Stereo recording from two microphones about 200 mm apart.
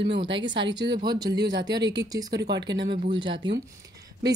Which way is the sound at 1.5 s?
60° right (ahead or behind).